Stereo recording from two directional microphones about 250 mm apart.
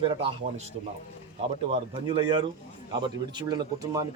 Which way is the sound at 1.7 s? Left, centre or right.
Centre.